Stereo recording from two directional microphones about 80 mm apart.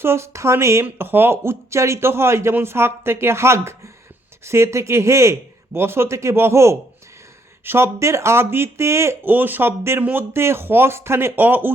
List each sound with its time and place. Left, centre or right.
0.0 s speech: right
10.0 s speech: right
10.3 s speech: right